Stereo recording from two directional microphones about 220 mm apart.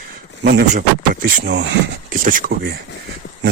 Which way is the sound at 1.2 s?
50° right (ahead or behind).